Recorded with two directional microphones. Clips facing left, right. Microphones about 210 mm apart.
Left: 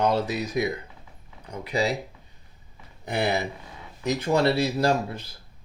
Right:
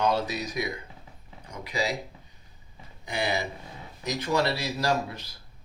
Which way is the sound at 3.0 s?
60° left (ahead or behind).